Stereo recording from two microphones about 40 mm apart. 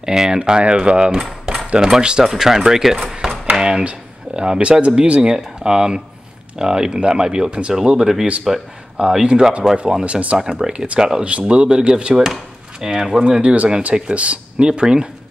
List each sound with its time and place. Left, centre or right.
0.0 s speech: centre
1.5 s cutlery: centre
2.0 s speech: right
3.0 s a sound: right
3.5 s speech: right
8.5 s speech: centre
8.9 s speech: right
10.0 s speech: right
11.2 s speech: right
12.8 s speech: centre
13.4 s speech: right